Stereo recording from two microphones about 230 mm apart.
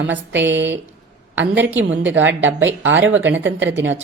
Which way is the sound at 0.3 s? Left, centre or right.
Right.